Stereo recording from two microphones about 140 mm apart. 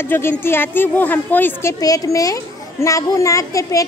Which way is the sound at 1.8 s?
25° left (ahead or behind).